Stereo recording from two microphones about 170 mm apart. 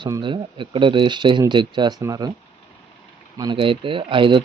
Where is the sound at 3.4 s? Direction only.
30° right (ahead or behind).